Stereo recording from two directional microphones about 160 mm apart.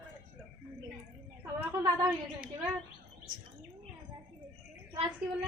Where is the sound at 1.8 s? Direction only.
20° right (ahead or behind).